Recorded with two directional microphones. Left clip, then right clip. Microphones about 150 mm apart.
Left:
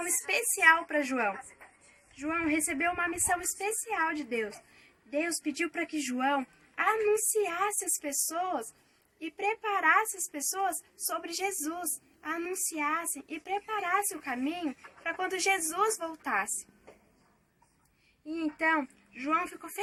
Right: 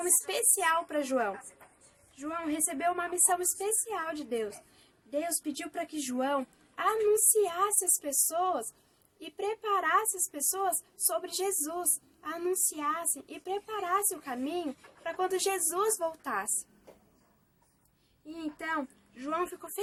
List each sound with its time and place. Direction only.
0.3 s a sound: centre (ahead or behind)
0.6 s speech: 35° right (ahead or behind)
18.5 s speech: 30° right (ahead or behind)